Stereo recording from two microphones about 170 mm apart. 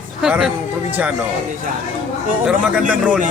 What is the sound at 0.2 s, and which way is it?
Speech, 5° right (ahead or behind).